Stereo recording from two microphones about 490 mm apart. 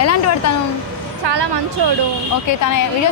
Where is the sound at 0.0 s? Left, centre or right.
Left.